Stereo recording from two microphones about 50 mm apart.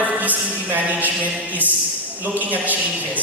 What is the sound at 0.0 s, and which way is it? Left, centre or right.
Music, right.